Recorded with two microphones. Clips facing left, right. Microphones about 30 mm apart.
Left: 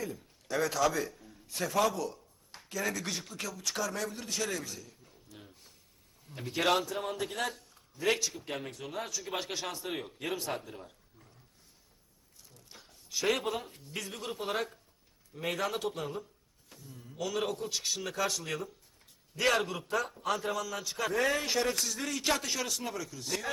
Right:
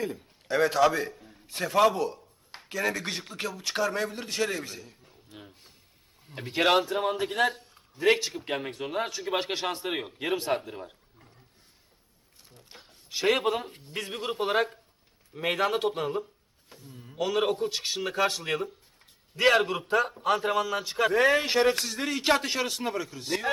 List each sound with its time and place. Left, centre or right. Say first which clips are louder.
0.5 s a man's voice: right 6 dB; right
12.5 s a man's voice: right 4 dB; right